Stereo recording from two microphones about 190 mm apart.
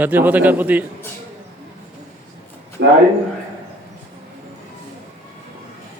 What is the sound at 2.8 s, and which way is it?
Speech, 80° right.